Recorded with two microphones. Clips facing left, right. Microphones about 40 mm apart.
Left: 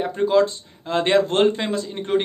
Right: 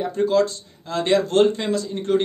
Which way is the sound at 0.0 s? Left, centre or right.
Left.